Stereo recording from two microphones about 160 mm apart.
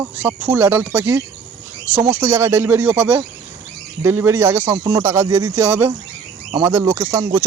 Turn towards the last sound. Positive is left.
turn(degrees=-20)  # may be behind; listen again after turning